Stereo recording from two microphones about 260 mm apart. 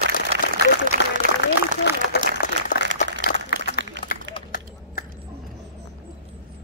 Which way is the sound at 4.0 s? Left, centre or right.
Right.